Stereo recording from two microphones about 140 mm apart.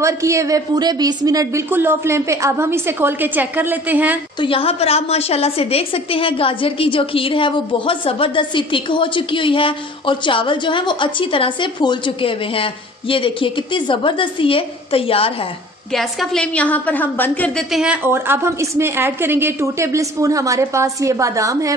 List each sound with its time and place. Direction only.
0.0 s a woman's voice: 20° right (ahead or behind)
4.4 s a woman's voice: 40° left (ahead or behind)
15.9 s a woman's voice: centre (ahead or behind)
17.6 s a woman's voice: 5° right (ahead or behind)
18.0 s a woman's voice: 15° right (ahead or behind)